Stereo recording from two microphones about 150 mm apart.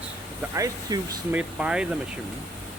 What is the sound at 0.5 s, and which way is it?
Speech, 25° right (ahead or behind).